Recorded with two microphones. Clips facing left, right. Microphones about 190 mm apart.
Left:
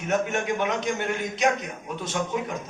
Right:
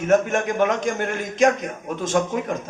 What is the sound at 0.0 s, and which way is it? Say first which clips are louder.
A man's voice: right 7 dB; 45° right (ahead or behind).